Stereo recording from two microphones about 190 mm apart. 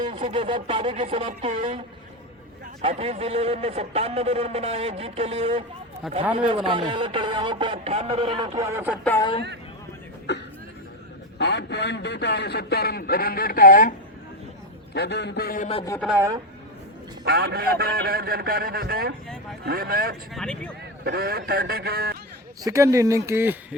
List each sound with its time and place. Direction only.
0.1 s speech: 30° right (ahead or behind)
2.8 s a man's voice: 35° right (ahead or behind); by 9.0 s 10° right (ahead or behind)
10.3 s a man's voice: 65° left (ahead or behind); by 13.9 s 45° left (ahead or behind)
14.9 s a man's voice: 60° left (ahead or behind)
16.1 s speech: 15° right (ahead or behind)
17.2 s a man's voice: 55° right (ahead or behind)
20.3 s speech: 5° left (ahead or behind)
21.0 s a man's voice: 55° right (ahead or behind)
22.6 s speech: 15° right (ahead or behind)